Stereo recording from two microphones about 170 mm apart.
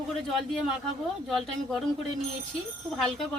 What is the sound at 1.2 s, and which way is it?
Speech, centre (ahead or behind).